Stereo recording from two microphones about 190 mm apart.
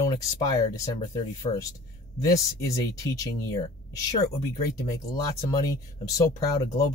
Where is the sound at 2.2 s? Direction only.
15° left (ahead or behind).